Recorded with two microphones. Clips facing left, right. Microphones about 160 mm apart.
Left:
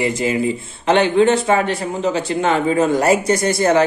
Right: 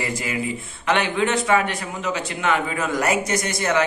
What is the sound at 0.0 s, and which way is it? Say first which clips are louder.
A man's voice: left 8 dB; 30° left (ahead or behind).